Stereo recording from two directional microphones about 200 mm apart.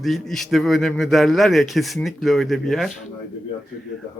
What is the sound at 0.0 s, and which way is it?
A man's voice, centre (ahead or behind).